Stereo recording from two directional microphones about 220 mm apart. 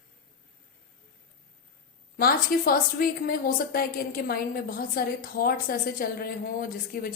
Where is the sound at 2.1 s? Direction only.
40° left (ahead or behind).